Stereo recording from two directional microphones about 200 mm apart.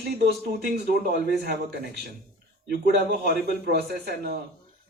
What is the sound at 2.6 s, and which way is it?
A man's voice, 55° right (ahead or behind).